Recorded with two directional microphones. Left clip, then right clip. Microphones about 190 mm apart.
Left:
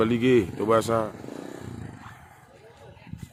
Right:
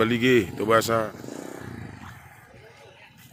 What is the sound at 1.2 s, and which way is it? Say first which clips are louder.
Vehicle: right 1 dB; 40° right (ahead or behind).